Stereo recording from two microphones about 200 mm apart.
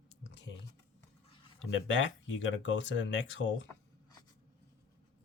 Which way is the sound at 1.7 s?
70° left (ahead or behind).